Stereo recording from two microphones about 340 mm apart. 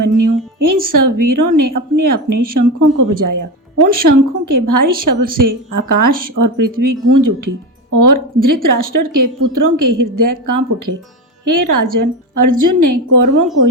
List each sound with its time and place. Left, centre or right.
0.0 s a woman's voice: right